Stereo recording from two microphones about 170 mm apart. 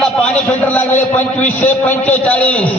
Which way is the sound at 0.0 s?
5° left (ahead or behind).